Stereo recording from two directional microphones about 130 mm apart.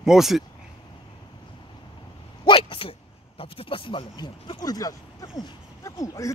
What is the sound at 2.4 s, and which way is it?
Speech, 40° left (ahead or behind).